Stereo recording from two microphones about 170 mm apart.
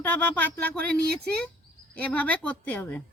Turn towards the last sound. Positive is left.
turn(degrees=10)  # may be behind; listen again after turning